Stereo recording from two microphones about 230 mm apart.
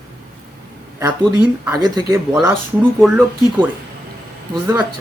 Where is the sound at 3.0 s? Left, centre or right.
Centre.